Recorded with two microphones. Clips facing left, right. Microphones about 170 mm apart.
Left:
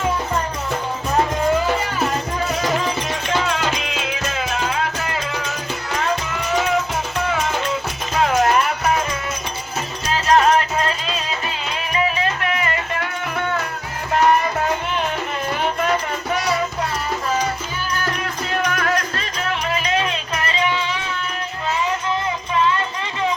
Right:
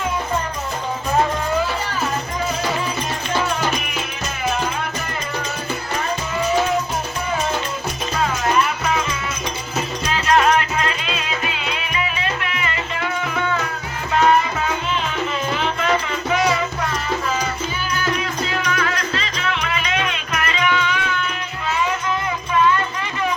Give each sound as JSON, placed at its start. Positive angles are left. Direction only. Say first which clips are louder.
{"t": 3.2, "sound": "music", "louder": "even", "side_deg": 75}
{"t": 8.2, "sound": "music", "louder": "left 3 dB", "side_deg": 60}
{"t": 10.1, "sound": "music", "louder": "left 1 dB", "side_deg": 35}
{"t": 15.5, "sound": "music", "louder": "left 1 dB", "side_deg": 50}
{"t": 18.2, "sound": "music", "louder": "left 1 dB", "side_deg": 50}
{"t": 22.5, "sound": "music", "louder": "right 2 dB", "side_deg": 25}